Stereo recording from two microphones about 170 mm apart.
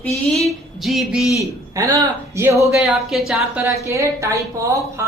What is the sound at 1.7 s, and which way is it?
Speech, 20° right (ahead or behind).